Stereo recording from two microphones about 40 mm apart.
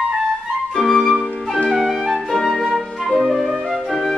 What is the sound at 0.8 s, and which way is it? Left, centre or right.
Flute, centre.